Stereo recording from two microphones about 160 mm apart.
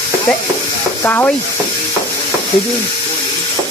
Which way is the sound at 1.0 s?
15° left (ahead or behind).